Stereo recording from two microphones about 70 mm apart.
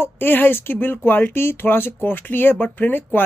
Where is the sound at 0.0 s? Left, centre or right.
Left.